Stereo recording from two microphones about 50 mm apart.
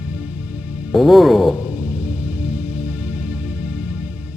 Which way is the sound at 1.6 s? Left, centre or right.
Right.